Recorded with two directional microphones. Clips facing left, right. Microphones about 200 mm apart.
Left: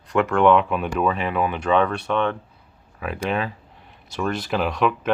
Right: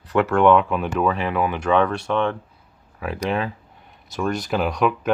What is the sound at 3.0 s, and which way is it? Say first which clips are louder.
Speech: right 1 dB; 25° right (ahead or behind).